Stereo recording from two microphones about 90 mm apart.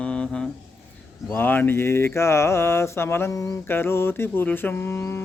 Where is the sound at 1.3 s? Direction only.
25° left (ahead or behind).